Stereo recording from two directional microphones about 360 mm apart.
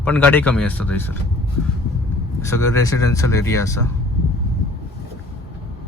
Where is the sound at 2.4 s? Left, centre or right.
Centre.